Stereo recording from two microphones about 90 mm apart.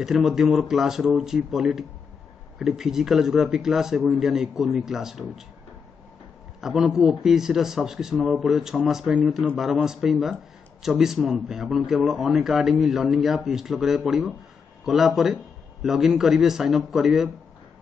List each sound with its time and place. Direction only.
0.0 s a man's voice: centre (ahead or behind)
6.6 s a man's voice: 5° right (ahead or behind)